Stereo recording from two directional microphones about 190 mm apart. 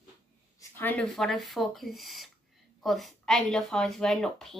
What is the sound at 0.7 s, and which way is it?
Speech, 10° left (ahead or behind).